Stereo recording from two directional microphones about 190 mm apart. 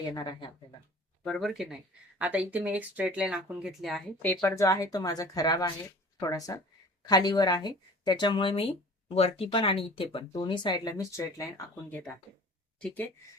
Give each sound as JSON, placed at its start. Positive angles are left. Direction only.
{"t": 0.1, "sound": "speech", "side_deg": 20}
{"t": 1.2, "sound": "speech", "side_deg": 0}